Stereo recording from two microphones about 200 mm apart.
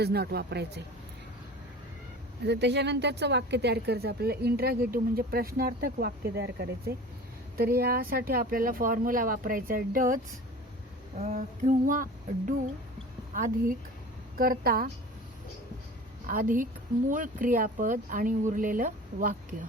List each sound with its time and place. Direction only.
0.0 s speech: 50° right (ahead or behind)
2.4 s speech: 60° right (ahead or behind)
11.2 s speech: 35° right (ahead or behind)
13.3 s speech: 45° right (ahead or behind)
16.2 s a woman's voice: 40° right (ahead or behind)